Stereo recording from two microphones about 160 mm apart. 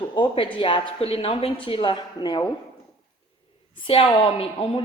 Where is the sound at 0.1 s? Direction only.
30° left (ahead or behind).